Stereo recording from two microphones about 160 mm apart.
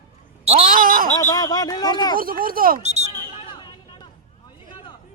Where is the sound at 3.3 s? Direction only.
35° left (ahead or behind).